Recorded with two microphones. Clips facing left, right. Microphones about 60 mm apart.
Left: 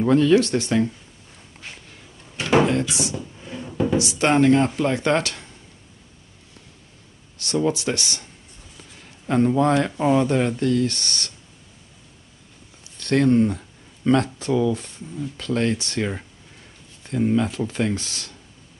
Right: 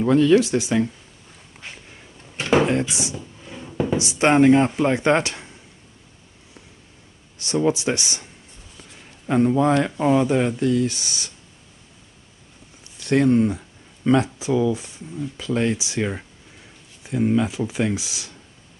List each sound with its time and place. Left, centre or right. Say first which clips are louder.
0.0 s speech: right 1 dB; centre
1.6 s a sound: right 1 dB; right
3.4 s a sound: left 3 dB; centre
3.9 s speech: right 2 dB; right
7.3 s speech: right 1 dB; centre
9.0 s speech: right 1 dB; centre
12.9 s speech: even; centre